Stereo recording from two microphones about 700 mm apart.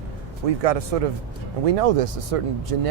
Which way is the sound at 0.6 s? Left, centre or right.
Right.